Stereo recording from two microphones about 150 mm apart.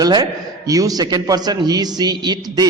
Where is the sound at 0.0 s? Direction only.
25° right (ahead or behind).